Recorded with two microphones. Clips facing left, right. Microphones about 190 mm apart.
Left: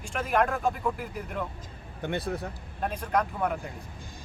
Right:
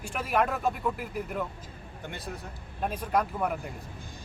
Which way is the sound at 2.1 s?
60° left (ahead or behind).